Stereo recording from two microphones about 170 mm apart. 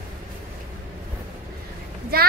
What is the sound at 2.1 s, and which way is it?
Speech, 65° right (ahead or behind).